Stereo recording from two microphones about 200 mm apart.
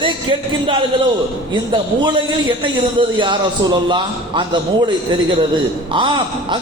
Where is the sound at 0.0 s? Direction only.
25° right (ahead or behind).